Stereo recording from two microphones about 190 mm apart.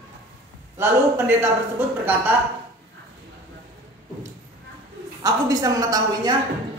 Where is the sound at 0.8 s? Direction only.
10° right (ahead or behind).